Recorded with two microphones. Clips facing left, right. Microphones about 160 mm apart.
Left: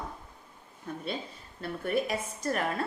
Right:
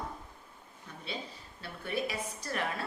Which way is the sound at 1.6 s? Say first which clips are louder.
Left 6 dB; 50° left (ahead or behind).